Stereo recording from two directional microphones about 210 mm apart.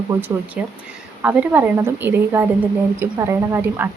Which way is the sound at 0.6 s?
5° right (ahead or behind).